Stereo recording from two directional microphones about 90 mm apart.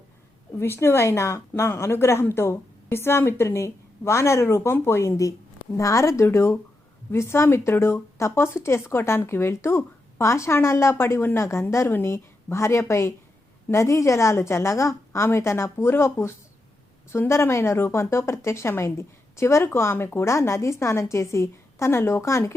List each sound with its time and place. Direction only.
0.6 s a woman's voice: 25° left (ahead or behind)